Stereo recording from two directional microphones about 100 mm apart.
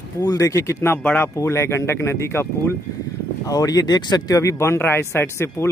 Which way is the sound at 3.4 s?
40° left (ahead or behind).